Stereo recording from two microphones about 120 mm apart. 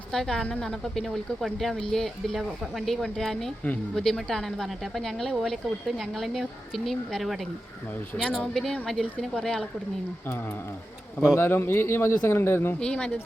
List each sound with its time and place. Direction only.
0.1 s a woman's voice: 5° left (ahead or behind)
11.3 s a man's voice: 20° left (ahead or behind)
12.8 s speech: 10° left (ahead or behind)